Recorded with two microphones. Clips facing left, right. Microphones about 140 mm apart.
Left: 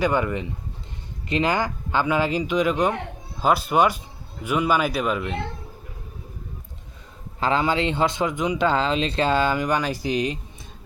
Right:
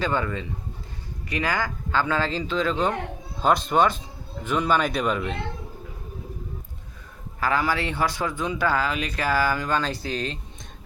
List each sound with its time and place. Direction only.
0.0 s speech: 15° left (ahead or behind)
7.3 s speech: 25° left (ahead or behind)